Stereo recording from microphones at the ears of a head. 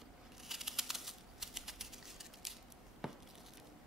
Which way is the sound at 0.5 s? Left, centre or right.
Centre.